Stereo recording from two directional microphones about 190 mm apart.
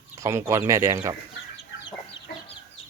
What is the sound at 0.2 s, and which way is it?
Speech, 15° right (ahead or behind).